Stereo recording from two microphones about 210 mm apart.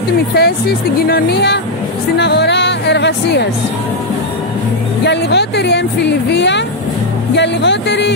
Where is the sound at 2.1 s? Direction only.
55° left (ahead or behind).